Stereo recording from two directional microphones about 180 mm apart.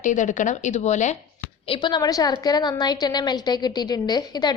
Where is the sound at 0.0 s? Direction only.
45° left (ahead or behind).